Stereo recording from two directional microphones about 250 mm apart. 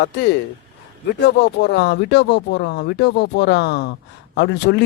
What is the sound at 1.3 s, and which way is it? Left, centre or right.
Speech, left.